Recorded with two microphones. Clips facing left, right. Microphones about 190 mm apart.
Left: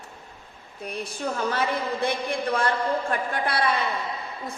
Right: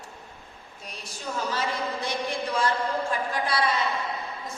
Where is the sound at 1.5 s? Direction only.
55° left (ahead or behind).